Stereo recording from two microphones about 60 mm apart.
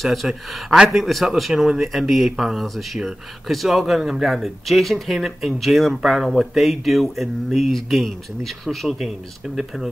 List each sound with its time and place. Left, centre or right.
0.0 s speech: centre